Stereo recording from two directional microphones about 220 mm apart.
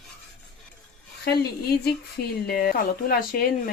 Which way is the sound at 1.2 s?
45° left (ahead or behind).